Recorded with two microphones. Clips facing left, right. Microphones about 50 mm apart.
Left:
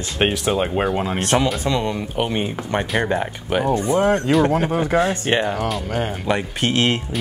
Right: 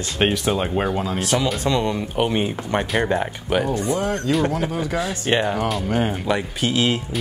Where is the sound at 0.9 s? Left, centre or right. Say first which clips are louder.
Left 2 dB; left.